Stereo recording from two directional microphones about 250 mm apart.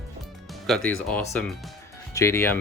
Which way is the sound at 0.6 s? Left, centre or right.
Centre.